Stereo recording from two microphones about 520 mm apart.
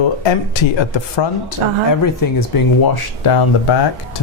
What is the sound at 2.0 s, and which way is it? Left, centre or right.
Speech, left.